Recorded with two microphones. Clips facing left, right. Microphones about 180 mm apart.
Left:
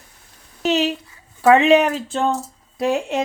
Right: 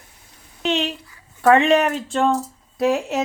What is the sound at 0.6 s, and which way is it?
Speech, 5° left (ahead or behind).